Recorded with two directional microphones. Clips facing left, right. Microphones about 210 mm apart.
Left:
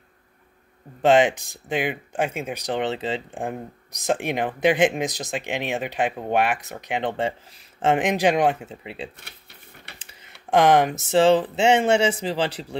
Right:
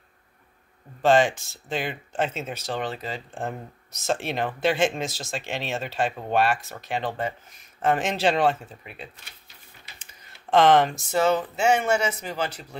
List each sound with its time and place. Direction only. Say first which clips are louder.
1.0 s speech: left 2 dB; 20° left (ahead or behind)
3.3 s speech: left 3 dB; 15° left (ahead or behind); by 7.9 s 30° left (ahead or behind)
7.9 s speech: left 3 dB; 15° left (ahead or behind)
8.6 s speech: left 7 dB; 30° left (ahead or behind)
9.2 s typewriter: left 4 dB; 65° left (ahead or behind)
10.5 s speech: left 1 dB; 15° left (ahead or behind)
11.0 s speech: left 5 dB; 30° left (ahead or behind)